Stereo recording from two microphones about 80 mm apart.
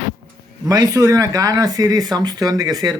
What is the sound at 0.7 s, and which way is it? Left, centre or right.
Speech, right.